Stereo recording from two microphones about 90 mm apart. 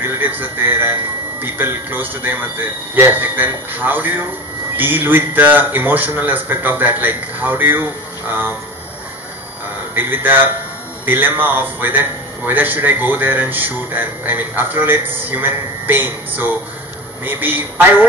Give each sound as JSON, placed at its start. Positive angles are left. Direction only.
{"t": 0.0, "sound": "a man's voice", "side_deg": -25}
{"t": 9.9, "sound": "a man's voice", "side_deg": -25}